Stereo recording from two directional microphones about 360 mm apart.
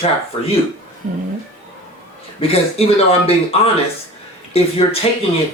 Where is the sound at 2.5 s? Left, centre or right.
Centre.